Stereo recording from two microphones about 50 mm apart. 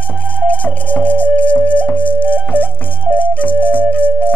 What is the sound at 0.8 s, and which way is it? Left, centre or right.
Music, left.